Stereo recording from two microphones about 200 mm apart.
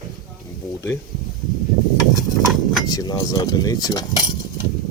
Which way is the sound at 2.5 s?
Centre (ahead or behind).